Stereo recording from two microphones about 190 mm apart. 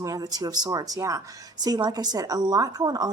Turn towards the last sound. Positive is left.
turn(degrees=-20)  # may be behind; listen again after turning